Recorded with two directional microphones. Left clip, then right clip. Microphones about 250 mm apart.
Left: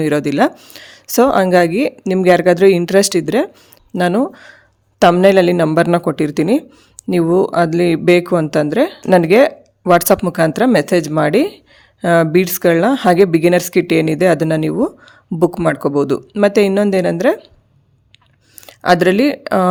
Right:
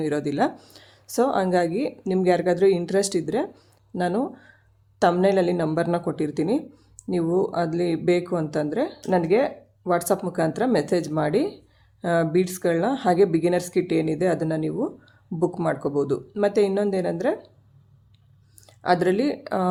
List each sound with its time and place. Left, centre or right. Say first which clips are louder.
0.0 s speech: left 9 dB; left
18.6 s speech: left 9 dB; left